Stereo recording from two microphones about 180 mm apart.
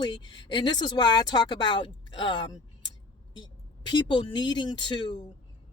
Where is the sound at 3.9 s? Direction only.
25° left (ahead or behind).